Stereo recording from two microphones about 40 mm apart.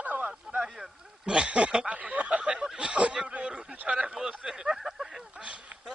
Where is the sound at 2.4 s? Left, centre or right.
Right.